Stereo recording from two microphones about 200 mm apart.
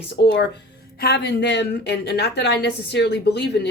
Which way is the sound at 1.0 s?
55° left (ahead or behind).